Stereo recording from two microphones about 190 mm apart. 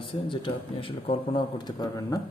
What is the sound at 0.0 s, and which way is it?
Speech, 25° left (ahead or behind).